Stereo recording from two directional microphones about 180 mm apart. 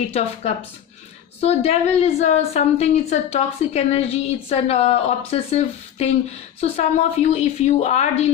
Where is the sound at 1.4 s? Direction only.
35° left (ahead or behind).